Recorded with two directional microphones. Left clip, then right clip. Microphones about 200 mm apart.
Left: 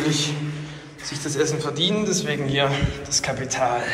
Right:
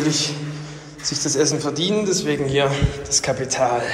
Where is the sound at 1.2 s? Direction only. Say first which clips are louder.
Right 3 dB; 25° right (ahead or behind).